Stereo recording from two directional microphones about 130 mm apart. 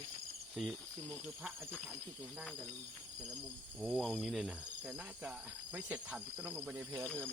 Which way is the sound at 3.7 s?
5° right (ahead or behind).